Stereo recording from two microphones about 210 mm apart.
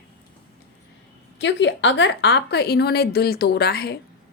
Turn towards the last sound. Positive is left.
turn(degrees=50)  # may be behind; listen again after turning